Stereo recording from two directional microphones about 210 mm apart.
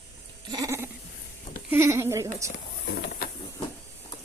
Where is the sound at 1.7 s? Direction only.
10° right (ahead or behind).